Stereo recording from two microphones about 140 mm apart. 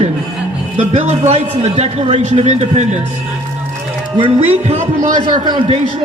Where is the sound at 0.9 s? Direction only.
55° right (ahead or behind).